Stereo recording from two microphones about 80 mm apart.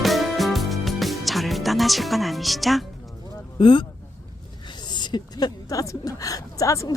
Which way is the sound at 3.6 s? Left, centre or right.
Left.